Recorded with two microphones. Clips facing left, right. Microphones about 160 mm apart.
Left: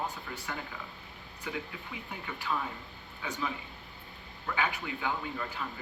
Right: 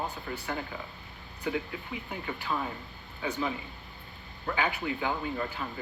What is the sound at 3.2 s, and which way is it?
Speech, 30° right (ahead or behind).